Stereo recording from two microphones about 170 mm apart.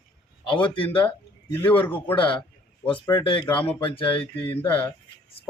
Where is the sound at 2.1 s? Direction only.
30° left (ahead or behind).